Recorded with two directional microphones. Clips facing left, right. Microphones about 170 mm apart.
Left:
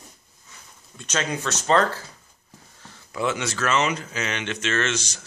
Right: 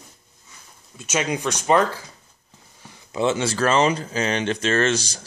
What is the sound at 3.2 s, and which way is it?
Speech, 30° right (ahead or behind).